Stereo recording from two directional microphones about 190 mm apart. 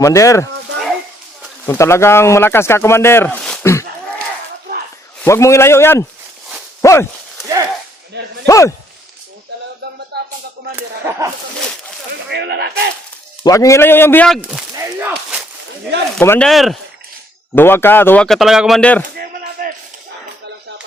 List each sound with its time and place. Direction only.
0.0 s speech: 15° left (ahead or behind)
1.6 s speech: 15° left (ahead or behind)
5.2 s speech: 15° left (ahead or behind)
7.4 s a sound: 15° right (ahead or behind)
8.4 s speech: 15° left (ahead or behind)
10.1 s a sound: 60° right (ahead or behind)
10.8 s speech: 10° right (ahead or behind)
12.3 s speech: 60° right (ahead or behind)
13.4 s speech: 15° left (ahead or behind); by 15.4 s 10° right (ahead or behind)
16.1 s speech: 10° left (ahead or behind)
17.5 s speech: 10° left (ahead or behind)
19.1 s a sound: 50° right (ahead or behind)